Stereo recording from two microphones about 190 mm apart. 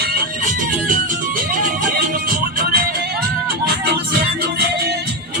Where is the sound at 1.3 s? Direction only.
45° right (ahead or behind).